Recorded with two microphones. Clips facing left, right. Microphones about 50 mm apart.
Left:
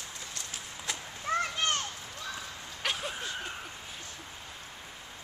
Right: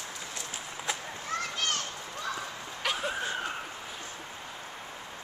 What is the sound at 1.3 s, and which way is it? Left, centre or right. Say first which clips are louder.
Children playing: left 5 dB; left.